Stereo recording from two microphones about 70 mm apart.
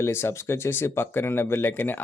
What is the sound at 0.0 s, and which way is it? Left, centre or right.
Speech, left.